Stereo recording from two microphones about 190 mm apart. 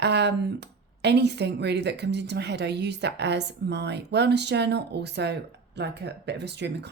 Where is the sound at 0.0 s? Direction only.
65° right (ahead or behind).